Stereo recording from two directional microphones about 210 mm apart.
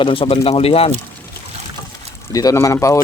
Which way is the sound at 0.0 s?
25° left (ahead or behind).